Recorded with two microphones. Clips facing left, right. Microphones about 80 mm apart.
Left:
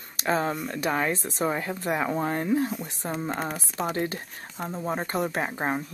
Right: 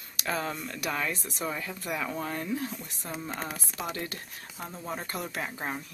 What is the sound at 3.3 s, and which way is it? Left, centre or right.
Speech, centre.